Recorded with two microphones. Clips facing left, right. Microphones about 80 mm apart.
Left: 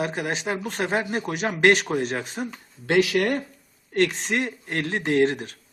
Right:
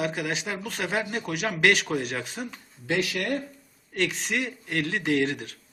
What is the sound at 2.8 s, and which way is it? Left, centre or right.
Speech, left.